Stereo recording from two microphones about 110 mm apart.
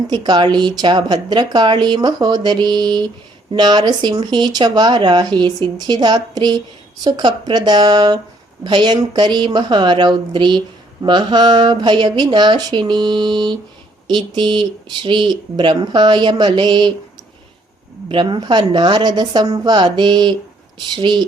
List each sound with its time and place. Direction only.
0.1 s a woman's voice: 45° right (ahead or behind)
18.1 s a woman's voice: 45° right (ahead or behind)